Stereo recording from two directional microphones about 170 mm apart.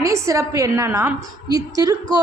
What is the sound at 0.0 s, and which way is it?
A woman's voice, 20° right (ahead or behind).